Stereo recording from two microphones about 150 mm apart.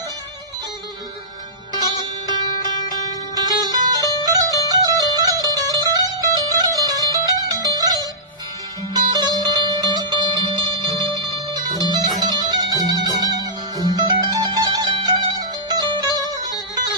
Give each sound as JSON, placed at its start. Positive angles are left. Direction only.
{"t": 1.7, "sound": "music", "side_deg": -25}
{"t": 3.3, "sound": "music", "side_deg": -25}